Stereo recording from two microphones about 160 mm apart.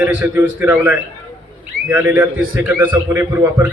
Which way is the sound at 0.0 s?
10° right (ahead or behind).